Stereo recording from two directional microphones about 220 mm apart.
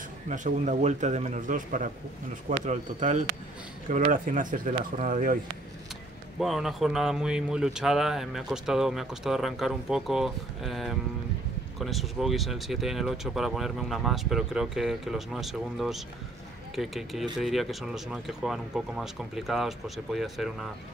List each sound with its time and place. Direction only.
0.3 s a man's voice: 35° right (ahead or behind)
6.4 s a man's voice: centre (ahead or behind)